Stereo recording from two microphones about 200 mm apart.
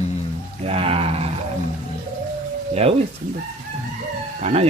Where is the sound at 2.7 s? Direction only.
30° right (ahead or behind).